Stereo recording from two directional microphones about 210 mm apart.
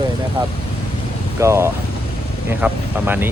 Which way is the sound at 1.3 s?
15° right (ahead or behind).